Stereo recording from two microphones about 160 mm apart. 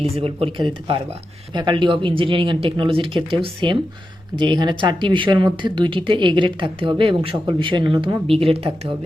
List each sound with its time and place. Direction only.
0.2 s speech: 35° right (ahead or behind)